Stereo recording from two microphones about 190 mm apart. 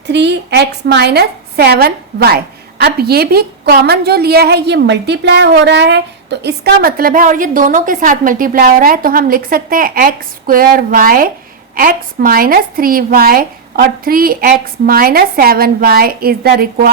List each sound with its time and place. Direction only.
0.1 s a woman's voice: 65° right (ahead or behind)